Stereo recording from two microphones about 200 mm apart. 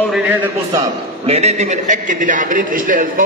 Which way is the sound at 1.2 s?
30° right (ahead or behind).